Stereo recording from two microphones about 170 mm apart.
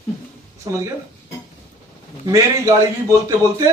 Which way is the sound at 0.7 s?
25° right (ahead or behind).